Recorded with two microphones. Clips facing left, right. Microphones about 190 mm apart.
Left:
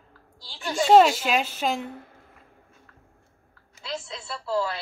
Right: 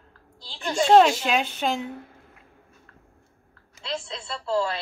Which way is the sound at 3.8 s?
25° right (ahead or behind).